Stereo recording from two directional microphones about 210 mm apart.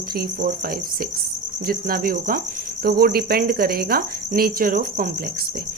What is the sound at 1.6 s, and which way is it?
Speech, 45° right (ahead or behind).